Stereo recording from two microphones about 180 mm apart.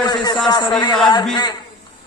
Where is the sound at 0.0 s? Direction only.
25° left (ahead or behind).